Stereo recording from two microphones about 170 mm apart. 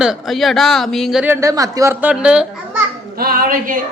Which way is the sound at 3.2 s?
60° right (ahead or behind).